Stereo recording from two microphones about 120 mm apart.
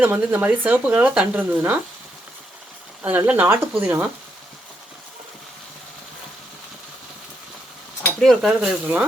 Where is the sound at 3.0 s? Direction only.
15° right (ahead or behind).